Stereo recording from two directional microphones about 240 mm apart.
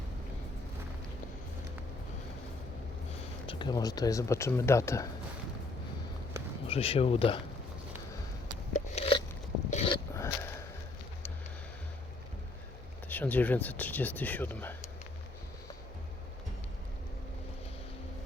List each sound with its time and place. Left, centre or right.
3.4 s speech: left
6.7 s speech: left
8.7 s a sound: left
13.1 s speech: centre